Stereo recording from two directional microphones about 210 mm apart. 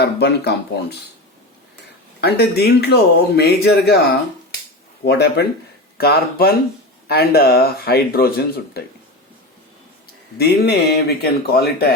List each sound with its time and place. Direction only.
0.0 s speech: 50° left (ahead or behind)
2.2 s speech: 50° left (ahead or behind)
5.0 s speech: 50° left (ahead or behind)
10.3 s speech: 50° left (ahead or behind)